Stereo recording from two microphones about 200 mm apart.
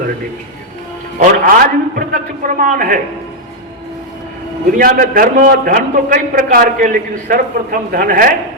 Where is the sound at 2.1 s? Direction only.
40° right (ahead or behind).